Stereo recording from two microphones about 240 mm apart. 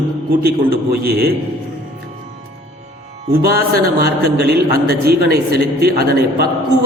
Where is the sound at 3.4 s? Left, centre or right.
Right.